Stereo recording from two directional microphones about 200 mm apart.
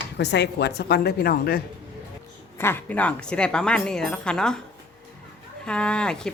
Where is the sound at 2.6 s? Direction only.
10° left (ahead or behind).